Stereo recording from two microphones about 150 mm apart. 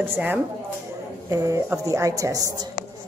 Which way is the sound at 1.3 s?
20° right (ahead or behind).